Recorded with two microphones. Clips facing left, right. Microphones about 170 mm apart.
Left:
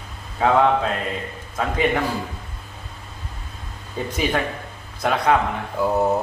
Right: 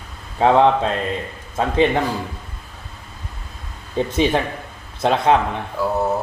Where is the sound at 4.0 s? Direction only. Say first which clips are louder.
Right 5 dB; 25° right (ahead or behind).